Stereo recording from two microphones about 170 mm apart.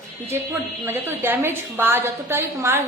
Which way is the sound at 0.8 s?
15° right (ahead or behind).